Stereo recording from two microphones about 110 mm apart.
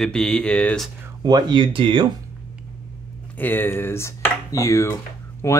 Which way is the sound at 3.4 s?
20° left (ahead or behind).